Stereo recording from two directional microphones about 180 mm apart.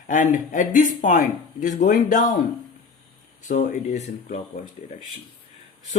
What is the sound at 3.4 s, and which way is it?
Speech, 45° left (ahead or behind).